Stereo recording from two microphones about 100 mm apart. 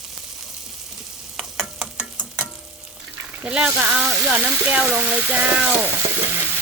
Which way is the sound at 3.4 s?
10° right (ahead or behind).